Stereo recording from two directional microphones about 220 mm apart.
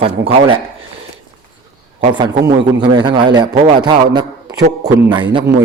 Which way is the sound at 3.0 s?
20° right (ahead or behind).